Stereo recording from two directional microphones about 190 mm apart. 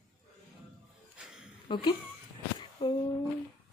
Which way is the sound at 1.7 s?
25° left (ahead or behind).